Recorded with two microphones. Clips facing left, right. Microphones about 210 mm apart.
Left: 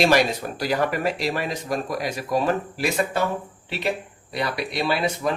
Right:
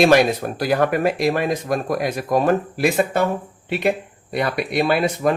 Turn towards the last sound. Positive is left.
turn(degrees=-50)  # may be behind; listen again after turning